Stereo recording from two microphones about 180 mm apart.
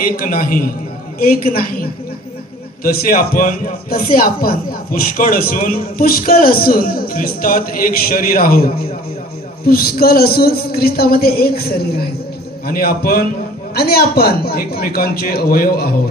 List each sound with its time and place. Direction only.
0.0 s a man's voice: 55° left (ahead or behind)